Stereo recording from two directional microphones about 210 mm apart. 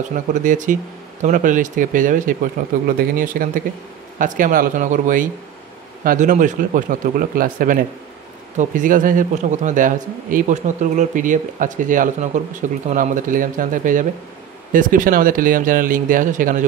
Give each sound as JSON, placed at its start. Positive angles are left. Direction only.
{"t": 0.1, "sound": "speech", "side_deg": -35}